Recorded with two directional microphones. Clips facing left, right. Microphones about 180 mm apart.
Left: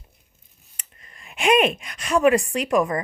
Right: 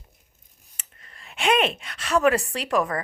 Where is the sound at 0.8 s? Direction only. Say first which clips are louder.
Left 1 dB; 10° left (ahead or behind).